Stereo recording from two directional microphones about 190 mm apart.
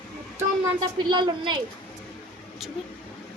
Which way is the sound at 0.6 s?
20° right (ahead or behind).